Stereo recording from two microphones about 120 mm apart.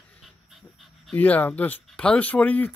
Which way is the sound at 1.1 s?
15° left (ahead or behind).